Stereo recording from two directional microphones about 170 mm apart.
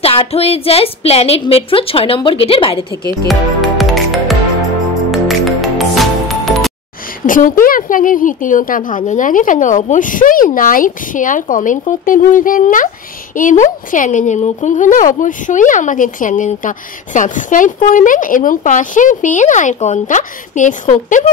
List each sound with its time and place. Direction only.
0.0 s a woman's voice: 35° left (ahead or behind)
3.3 s music: centre (ahead or behind)
7.2 s speech: 50° left (ahead or behind)